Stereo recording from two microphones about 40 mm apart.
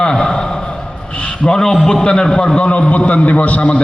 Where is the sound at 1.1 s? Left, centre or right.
Left.